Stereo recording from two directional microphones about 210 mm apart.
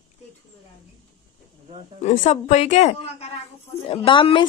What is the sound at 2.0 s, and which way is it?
A woman's voice, 35° left (ahead or behind).